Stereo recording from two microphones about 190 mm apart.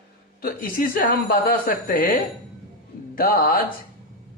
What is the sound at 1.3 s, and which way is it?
Speech, 50° left (ahead or behind).